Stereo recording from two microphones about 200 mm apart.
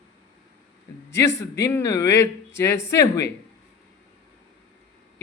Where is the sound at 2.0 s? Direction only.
60° left (ahead or behind).